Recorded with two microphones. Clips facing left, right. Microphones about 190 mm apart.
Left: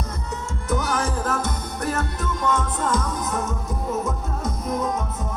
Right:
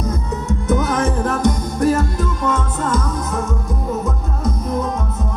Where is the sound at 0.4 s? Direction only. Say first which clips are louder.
Right 7 dB; 20° right (ahead or behind).